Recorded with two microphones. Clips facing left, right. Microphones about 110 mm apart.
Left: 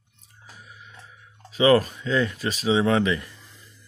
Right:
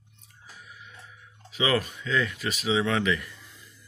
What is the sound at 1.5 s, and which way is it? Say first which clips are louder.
Speech: left 8 dB; 40° left (ahead or behind).